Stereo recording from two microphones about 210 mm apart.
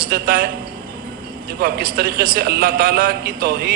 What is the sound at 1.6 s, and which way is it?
A man's voice, 45° right (ahead or behind).